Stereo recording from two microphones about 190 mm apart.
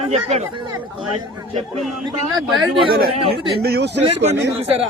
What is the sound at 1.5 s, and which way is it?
A woman's voice, centre (ahead or behind).